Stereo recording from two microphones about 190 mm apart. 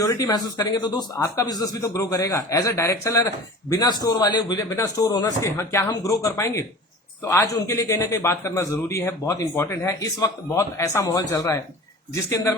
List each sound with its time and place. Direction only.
0.0 s speech: 20° left (ahead or behind)